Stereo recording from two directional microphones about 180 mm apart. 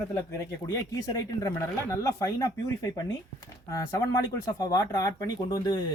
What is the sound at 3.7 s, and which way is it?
Speech, 20° left (ahead or behind).